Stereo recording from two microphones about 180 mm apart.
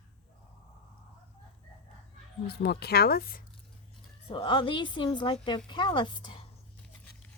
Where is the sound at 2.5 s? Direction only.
60° left (ahead or behind).